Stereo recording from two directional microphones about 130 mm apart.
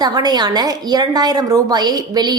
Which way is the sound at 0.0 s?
30° right (ahead or behind).